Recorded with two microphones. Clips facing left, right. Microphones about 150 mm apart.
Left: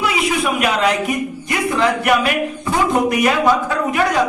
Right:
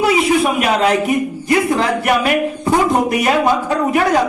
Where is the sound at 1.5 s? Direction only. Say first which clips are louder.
Right 2 dB; 35° right (ahead or behind).